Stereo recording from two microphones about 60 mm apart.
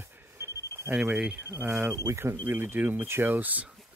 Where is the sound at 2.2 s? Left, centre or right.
Right.